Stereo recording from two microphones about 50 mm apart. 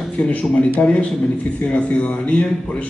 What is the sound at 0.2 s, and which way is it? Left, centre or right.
A man's voice, left.